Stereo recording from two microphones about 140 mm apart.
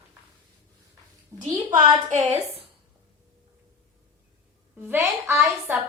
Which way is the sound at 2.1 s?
50° right (ahead or behind).